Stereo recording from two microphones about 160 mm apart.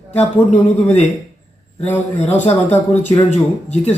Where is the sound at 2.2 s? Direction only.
45° left (ahead or behind).